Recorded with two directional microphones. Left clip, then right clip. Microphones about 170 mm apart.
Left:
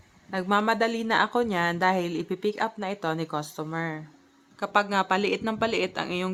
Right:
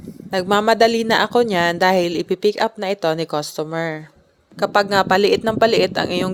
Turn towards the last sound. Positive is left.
turn(degrees=-40)  # may be behind; listen again after turning